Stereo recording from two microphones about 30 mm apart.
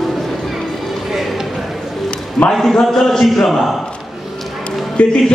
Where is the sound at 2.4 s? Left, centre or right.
Left.